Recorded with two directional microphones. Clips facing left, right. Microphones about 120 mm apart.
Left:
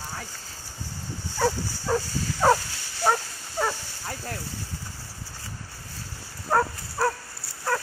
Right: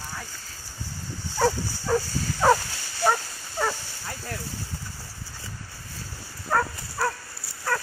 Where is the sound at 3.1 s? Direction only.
5° left (ahead or behind).